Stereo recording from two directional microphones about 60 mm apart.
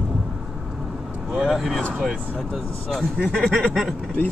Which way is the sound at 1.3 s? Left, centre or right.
Centre.